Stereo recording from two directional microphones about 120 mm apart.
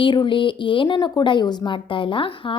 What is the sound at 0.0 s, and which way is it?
A woman's voice, 40° left (ahead or behind).